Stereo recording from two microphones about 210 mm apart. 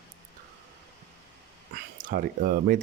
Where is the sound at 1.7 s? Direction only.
45° right (ahead or behind).